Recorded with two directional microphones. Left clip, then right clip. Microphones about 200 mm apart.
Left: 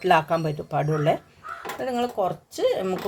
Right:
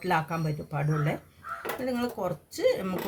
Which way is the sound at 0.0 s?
45° left (ahead or behind).